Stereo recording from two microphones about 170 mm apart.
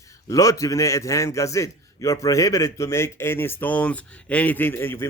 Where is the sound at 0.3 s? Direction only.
20° left (ahead or behind).